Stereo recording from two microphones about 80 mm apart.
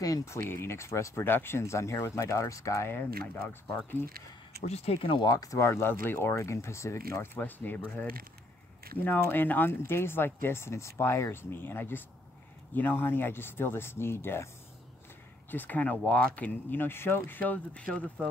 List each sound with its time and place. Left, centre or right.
0.0 s speech: left
3.0 s speech: left
5.3 s speech: left
7.3 s speech: left
9.0 s speech: left
15.5 s speech: left